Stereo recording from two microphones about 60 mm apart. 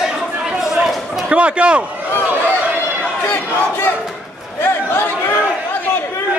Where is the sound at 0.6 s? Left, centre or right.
Centre.